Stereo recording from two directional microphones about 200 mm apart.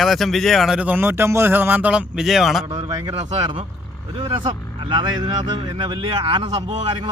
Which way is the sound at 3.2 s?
30° right (ahead or behind).